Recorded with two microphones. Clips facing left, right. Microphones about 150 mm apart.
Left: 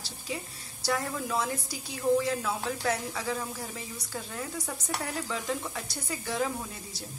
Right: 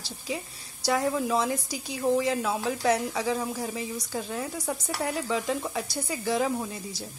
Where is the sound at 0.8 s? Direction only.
15° right (ahead or behind).